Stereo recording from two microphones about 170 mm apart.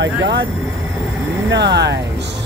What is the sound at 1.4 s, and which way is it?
Speech, 90° right.